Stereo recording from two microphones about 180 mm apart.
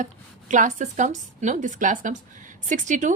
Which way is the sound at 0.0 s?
45° right (ahead or behind).